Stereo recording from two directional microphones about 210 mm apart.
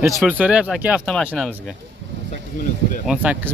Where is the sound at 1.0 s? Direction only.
5° left (ahead or behind).